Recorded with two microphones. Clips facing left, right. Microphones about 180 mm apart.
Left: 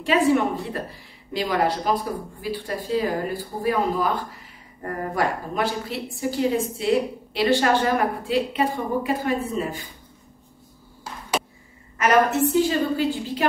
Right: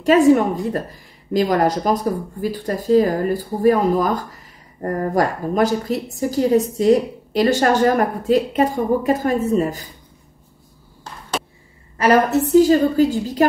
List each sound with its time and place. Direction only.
0.0 s a woman's voice: 45° right (ahead or behind)
11.1 s a sound: 5° left (ahead or behind)
12.0 s a woman's voice: 35° right (ahead or behind)